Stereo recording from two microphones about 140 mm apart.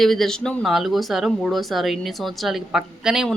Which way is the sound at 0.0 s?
Centre (ahead or behind).